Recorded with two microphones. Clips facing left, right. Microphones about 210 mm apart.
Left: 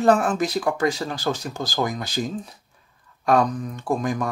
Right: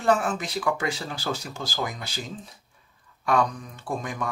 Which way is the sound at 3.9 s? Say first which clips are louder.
Left 7 dB; 40° left (ahead or behind).